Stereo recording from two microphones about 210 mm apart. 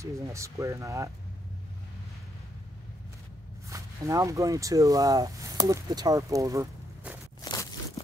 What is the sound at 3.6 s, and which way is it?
Speech, 15° right (ahead or behind).